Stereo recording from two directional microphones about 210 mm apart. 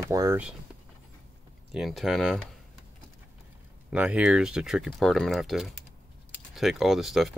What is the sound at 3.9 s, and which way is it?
Speech, 5° right (ahead or behind).